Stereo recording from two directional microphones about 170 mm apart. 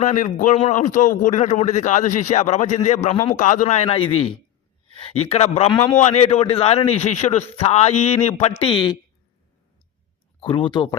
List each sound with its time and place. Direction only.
0.0 s a man's voice: 45° left (ahead or behind); by 9.0 s 30° left (ahead or behind)
10.4 s speech: 30° left (ahead or behind)